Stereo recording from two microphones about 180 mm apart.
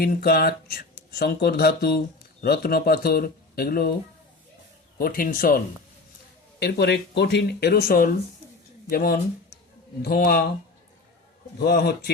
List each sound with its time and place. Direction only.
0.0 s speech: 60° left (ahead or behind)
4.9 s speech: 55° left (ahead or behind)
6.6 s speech: 65° left (ahead or behind)
11.6 s speech: 60° left (ahead or behind)